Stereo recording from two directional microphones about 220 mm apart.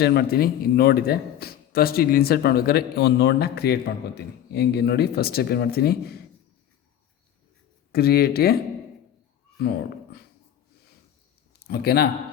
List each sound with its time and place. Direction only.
0.0 s a man's voice: 45° left (ahead or behind)
7.9 s a man's voice: 45° left (ahead or behind)
9.6 s speech: 45° left (ahead or behind)
11.7 s a man's voice: 45° left (ahead or behind)